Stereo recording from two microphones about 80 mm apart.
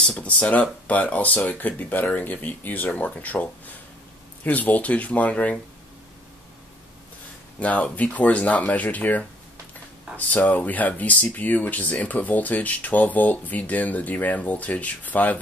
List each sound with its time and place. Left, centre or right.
0.0 s speech: centre
7.6 s speech: centre